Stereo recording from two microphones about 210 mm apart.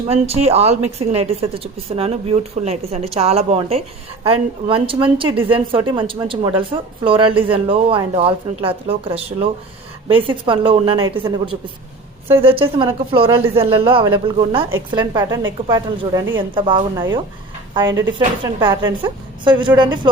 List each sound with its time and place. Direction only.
0.1 s a woman's voice: 30° right (ahead or behind)